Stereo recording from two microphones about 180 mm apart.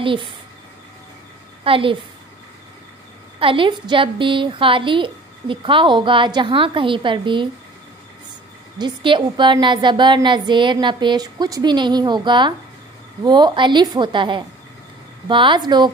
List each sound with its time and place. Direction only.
0.0 s a woman's voice: 25° right (ahead or behind)
1.6 s a woman's voice: 30° right (ahead or behind)
3.3 s a woman's voice: 30° right (ahead or behind)
8.7 s a woman's voice: 25° right (ahead or behind)